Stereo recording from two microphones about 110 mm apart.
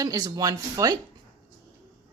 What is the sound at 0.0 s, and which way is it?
Speech, 30° right (ahead or behind).